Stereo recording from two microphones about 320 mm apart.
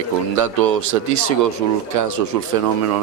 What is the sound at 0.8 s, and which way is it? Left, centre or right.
Speech, right.